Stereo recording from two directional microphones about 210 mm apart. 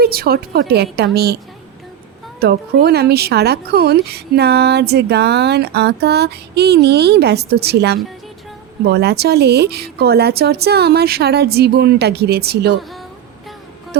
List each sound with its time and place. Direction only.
0.0 s speech: 45° right (ahead or behind)
2.4 s speech: 50° right (ahead or behind)
13.9 s music: 50° right (ahead or behind)